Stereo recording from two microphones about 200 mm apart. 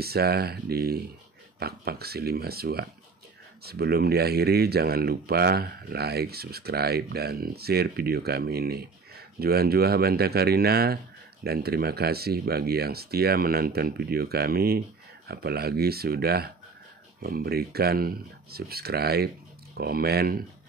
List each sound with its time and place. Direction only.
0.0 s speech: 50° right (ahead or behind)